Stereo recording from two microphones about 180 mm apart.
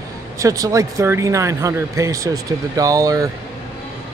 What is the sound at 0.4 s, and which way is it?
Speech, 20° right (ahead or behind).